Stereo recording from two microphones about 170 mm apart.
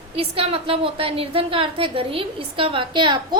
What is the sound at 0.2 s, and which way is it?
A woman's voice, 35° right (ahead or behind).